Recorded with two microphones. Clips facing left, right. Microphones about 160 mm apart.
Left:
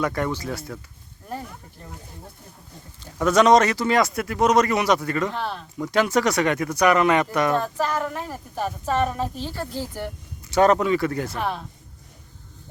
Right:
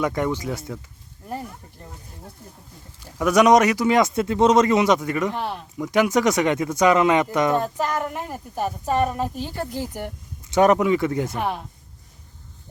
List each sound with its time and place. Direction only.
0.0 s speech: 20° right (ahead or behind)
3.0 s speech: 10° right (ahead or behind)